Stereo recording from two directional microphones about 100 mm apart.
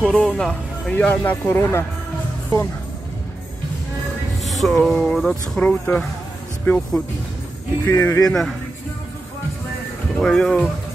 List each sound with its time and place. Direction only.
0.0 s speech: 5° left (ahead or behind); by 1.9 s 25° left (ahead or behind)
4.5 s speech: centre (ahead or behind)
5.7 s speech: 20° left (ahead or behind)
7.8 s speech: 25° left (ahead or behind)
8.3 s speech: 5° left (ahead or behind)
10.1 s speech: 5° left (ahead or behind)